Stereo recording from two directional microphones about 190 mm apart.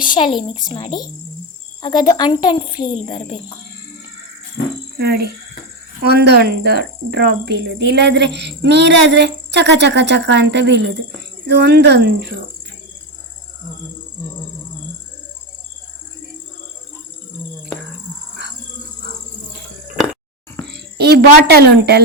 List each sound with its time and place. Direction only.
0.0 s a woman's voice: 25° left (ahead or behind)
4.6 s speech: 60° left (ahead or behind)
4.9 s speech: 55° right (ahead or behind)
20.7 s speech: 60° right (ahead or behind)